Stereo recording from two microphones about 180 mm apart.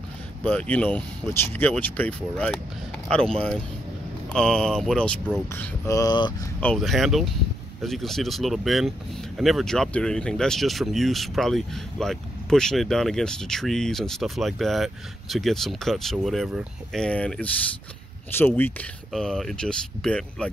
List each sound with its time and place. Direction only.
0.4 s speech: 5° left (ahead or behind); by 6.3 s 25° left (ahead or behind)
6.6 s speech: centre (ahead or behind)